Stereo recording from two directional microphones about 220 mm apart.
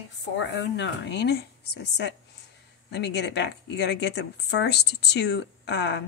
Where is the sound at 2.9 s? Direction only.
50° left (ahead or behind).